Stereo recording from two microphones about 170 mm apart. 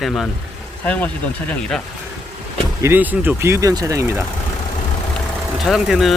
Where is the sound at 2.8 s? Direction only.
10° right (ahead or behind).